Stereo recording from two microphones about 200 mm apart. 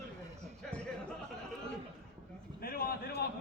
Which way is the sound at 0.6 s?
5° left (ahead or behind).